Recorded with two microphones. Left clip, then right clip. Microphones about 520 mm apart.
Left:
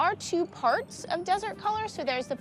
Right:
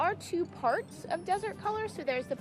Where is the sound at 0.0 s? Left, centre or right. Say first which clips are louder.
Left 4 dB; left.